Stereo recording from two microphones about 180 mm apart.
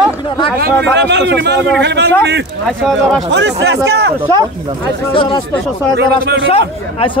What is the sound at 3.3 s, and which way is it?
Speech, 70° right (ahead or behind).